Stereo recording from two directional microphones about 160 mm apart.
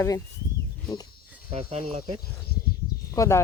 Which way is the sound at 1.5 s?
40° right (ahead or behind).